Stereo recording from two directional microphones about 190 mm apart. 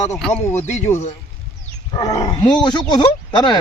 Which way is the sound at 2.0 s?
20° left (ahead or behind).